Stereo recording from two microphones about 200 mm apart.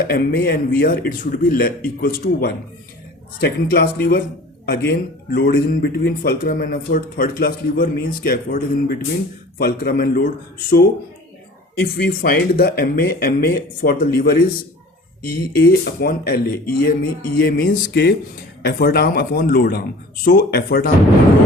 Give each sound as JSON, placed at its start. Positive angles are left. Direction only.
{"t": 0.1, "sound": "speech", "side_deg": 50}
{"t": 15.5, "sound": "speech", "side_deg": 50}